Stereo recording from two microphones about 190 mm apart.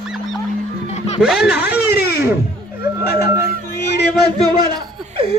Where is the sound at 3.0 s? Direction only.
55° left (ahead or behind).